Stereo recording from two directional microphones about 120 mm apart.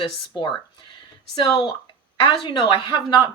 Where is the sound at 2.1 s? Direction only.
40° left (ahead or behind).